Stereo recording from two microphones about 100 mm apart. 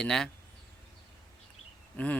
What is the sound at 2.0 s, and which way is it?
Speech, 15° left (ahead or behind).